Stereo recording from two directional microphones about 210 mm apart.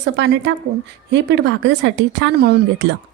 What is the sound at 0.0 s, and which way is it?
Speech, 55° right (ahead or behind).